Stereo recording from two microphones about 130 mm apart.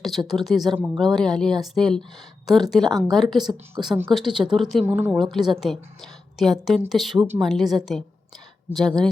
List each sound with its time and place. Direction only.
0.3 s a woman's voice: centre (ahead or behind)
4.9 s speech: 15° right (ahead or behind)
5.1 s a woman's voice: centre (ahead or behind)